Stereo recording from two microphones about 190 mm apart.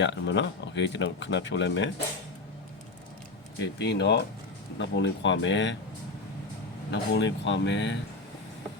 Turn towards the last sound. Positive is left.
turn(degrees=75)  # may be behind; listen again after turning